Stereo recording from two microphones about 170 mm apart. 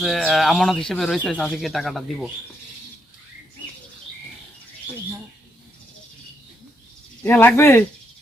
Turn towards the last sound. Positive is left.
turn(degrees=15)  # may be behind; listen again after turning